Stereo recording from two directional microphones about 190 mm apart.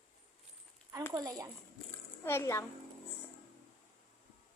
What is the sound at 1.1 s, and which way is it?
Speech, 20° right (ahead or behind).